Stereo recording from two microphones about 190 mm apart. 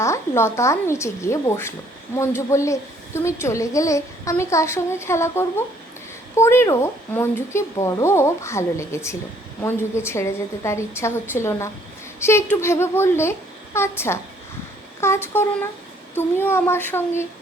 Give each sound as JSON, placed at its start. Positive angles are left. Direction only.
{"t": 0.0, "sound": "speech", "side_deg": 15}